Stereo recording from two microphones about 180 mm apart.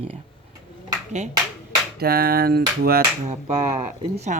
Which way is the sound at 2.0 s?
60° right (ahead or behind).